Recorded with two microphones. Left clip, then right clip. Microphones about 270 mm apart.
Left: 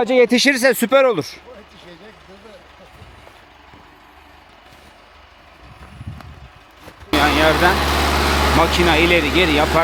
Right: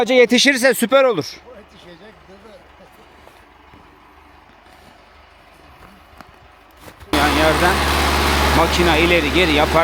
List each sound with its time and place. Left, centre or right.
0.0 s a man's voice: centre
6.8 s vehicle: centre